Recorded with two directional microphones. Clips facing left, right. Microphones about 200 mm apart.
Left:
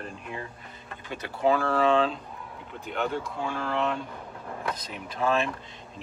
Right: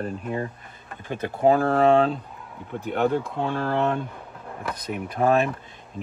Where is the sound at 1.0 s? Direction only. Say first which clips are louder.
Right 5 dB; 50° right (ahead or behind).